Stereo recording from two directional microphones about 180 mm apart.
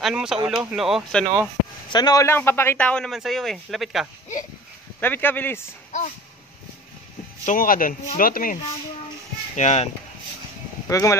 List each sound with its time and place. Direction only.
0.0 s speech: 5° right (ahead or behind)
1.9 s a man's voice: 20° left (ahead or behind); by 4.1 s centre (ahead or behind)
5.0 s a man's voice: 10° left (ahead or behind)
5.9 s a sound: 40° left (ahead or behind)
7.4 s speech: 50° left (ahead or behind)
9.6 s speech: 40° left (ahead or behind)
10.9 s speech: 15° left (ahead or behind)